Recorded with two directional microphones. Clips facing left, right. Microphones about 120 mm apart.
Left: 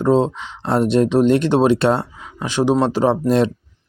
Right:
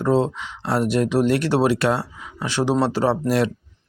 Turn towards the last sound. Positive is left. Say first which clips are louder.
# left 4 dB
turn(degrees=25)  # may be behind; listen again after turning